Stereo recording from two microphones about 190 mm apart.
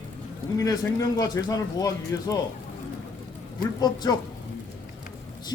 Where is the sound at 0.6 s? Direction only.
20° left (ahead or behind).